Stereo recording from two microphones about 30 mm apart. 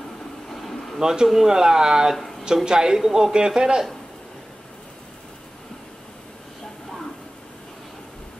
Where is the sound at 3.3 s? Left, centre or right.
Right.